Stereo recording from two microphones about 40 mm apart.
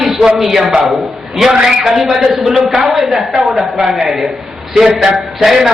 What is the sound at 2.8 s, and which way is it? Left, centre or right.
A woman's voice, centre.